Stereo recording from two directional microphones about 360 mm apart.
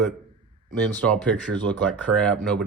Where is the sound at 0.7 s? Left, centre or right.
Centre.